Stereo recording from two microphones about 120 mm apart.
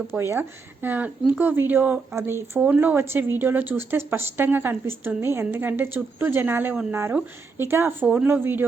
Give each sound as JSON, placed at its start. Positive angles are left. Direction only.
{"t": 0.1, "sound": "speech", "side_deg": -20}